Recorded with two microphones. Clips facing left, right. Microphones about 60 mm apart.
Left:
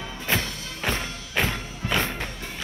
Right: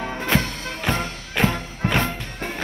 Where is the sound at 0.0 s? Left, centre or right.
Right.